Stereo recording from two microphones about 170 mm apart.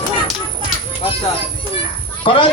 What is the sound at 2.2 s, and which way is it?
Speech, 30° left (ahead or behind).